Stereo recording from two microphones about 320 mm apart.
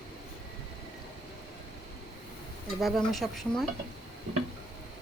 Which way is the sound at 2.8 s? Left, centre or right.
Centre.